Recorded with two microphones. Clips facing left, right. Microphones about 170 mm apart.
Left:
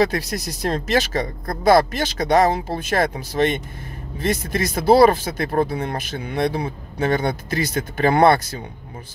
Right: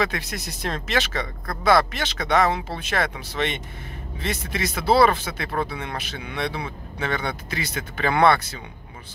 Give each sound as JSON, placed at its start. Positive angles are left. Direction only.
{"t": 0.0, "sound": "speech", "side_deg": 35}